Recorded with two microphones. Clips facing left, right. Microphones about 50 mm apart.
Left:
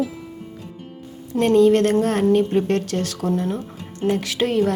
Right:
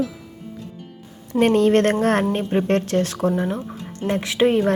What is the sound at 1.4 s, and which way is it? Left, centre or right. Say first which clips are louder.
Speech: left 1 dB; right.